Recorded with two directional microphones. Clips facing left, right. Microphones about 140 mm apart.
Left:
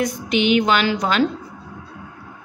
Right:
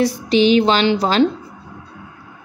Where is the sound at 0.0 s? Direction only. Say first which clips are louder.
Right 5 dB; 30° right (ahead or behind).